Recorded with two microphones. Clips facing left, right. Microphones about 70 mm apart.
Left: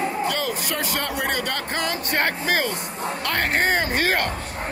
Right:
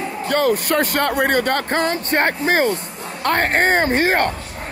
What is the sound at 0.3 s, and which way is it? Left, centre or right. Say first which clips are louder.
Speech: right 8 dB; right.